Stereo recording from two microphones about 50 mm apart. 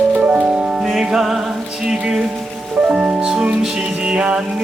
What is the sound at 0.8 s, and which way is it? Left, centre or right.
Music, centre.